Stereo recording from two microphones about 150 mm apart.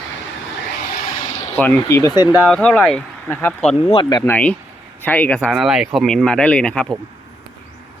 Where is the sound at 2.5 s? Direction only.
5° left (ahead or behind).